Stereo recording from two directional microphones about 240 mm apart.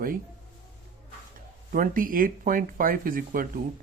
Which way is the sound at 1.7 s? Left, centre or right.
Right.